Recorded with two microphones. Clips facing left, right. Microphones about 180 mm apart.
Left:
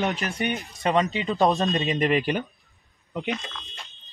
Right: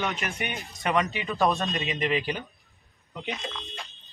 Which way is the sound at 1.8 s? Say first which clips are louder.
Left 3 dB; 45° left (ahead or behind).